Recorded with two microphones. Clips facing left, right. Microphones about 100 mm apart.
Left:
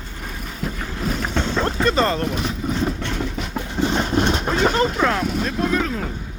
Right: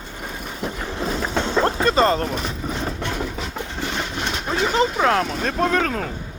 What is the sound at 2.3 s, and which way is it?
Speech, centre (ahead or behind).